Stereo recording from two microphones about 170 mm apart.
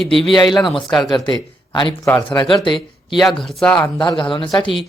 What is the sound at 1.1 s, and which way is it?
Speech, 25° left (ahead or behind).